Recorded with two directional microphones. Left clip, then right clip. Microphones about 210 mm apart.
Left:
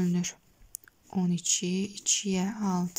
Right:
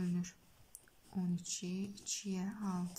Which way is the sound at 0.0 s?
35° left (ahead or behind).